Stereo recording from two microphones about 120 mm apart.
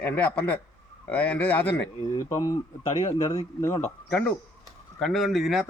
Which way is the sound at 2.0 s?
30° left (ahead or behind).